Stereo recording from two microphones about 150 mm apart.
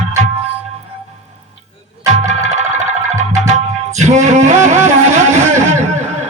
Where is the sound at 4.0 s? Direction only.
50° right (ahead or behind).